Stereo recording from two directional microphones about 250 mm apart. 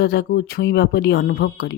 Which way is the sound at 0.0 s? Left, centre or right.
Left.